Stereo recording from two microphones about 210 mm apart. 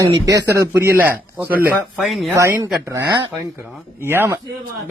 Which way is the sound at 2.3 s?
15° right (ahead or behind).